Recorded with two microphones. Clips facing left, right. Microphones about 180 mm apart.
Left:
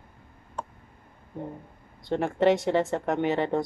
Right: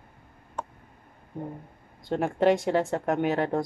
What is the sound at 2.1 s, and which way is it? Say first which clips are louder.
Speech: even; 5° right (ahead or behind).